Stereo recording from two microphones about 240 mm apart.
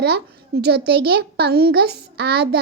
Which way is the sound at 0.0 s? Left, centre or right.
Right.